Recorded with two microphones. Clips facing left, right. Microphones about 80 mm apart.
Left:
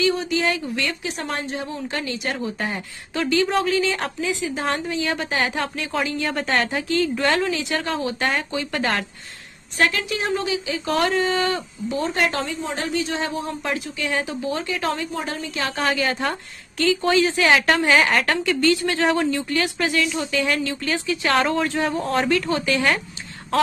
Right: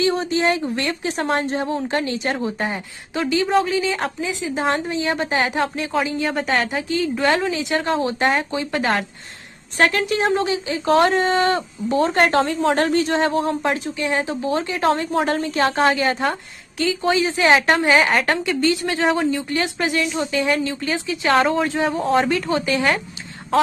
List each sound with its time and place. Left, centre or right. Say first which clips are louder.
0.0 s speech: right 2 dB; right
2.7 s a woman's voice: right 2 dB; centre
6.2 s a woman's voice: right 2 dB; centre; by 8.8 s right
9.8 s speech: right 4 dB; right
12.4 s speech: right 8 dB; right
15.0 s speech: right 8 dB; right
16.3 s a woman's voice: right 3 dB; centre
21.3 s a woman's voice: right 3 dB; centre